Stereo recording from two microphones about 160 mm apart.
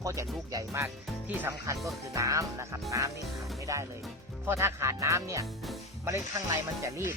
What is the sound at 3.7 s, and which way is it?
Speech, 20° right (ahead or behind).